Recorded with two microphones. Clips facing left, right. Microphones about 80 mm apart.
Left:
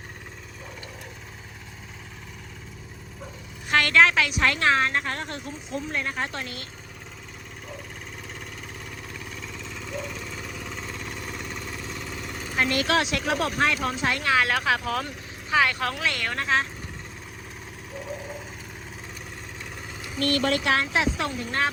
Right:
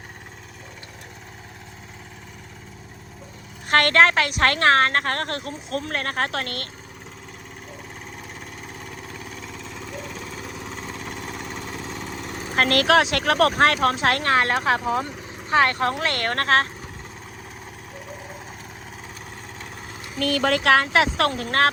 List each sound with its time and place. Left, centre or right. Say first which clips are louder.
3.7 s a woman's voice: right 3 dB; right
8.8 s vehicle: right 2 dB; right
12.2 s vehicle: right 3 dB; right
12.5 s speech: right 6 dB; right
13.8 s speech: right 6 dB; right
14.3 s speech: even; right
15.4 s speech: right 4 dB; right
16.0 s a woman's voice: right 4 dB; right
20.7 s speech: right 6 dB; right